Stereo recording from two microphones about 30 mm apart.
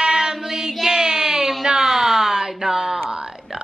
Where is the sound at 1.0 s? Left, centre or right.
Right.